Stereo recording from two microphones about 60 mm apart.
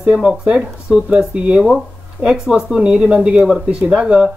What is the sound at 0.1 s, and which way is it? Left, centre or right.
Speech, centre.